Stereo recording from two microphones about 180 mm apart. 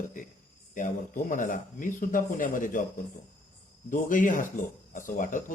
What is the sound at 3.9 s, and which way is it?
Speech, 45° left (ahead or behind).